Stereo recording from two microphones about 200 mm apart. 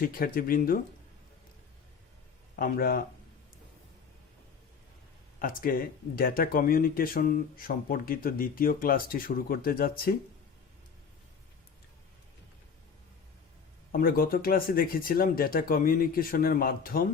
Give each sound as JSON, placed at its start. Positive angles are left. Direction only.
{"t": 0.0, "sound": "speech", "side_deg": 45}
{"t": 2.6, "sound": "speech", "side_deg": 45}
{"t": 5.4, "sound": "speech", "side_deg": 45}
{"t": 13.9, "sound": "speech", "side_deg": 45}